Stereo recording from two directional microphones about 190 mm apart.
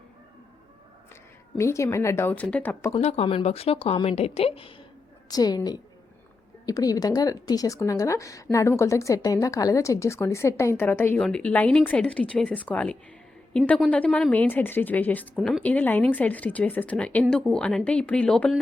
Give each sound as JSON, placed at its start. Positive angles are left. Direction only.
{"t": 1.1, "sound": "a woman's voice", "side_deg": 15}
{"t": 2.9, "sound": "a woman's voice", "side_deg": 35}